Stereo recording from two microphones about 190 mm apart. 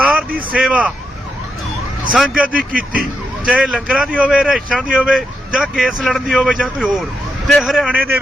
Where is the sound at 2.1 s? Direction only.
5° right (ahead or behind).